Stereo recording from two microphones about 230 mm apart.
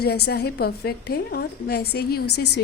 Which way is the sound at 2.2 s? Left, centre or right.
Left.